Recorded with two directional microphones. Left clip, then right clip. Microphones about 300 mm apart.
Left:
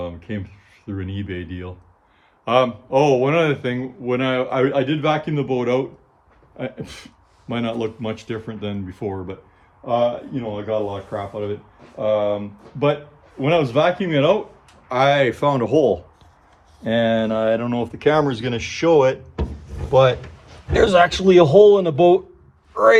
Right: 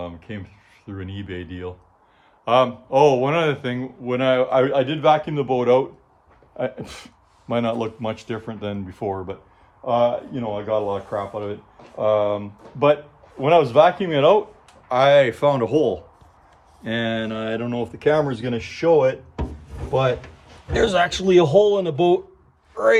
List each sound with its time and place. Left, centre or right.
0.0 s speech: centre; by 18.9 s left
20.7 s a man's voice: centre